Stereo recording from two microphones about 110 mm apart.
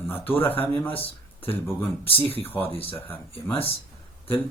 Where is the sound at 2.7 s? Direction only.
55° left (ahead or behind).